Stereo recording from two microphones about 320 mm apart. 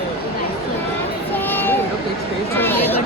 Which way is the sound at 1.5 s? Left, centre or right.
Centre.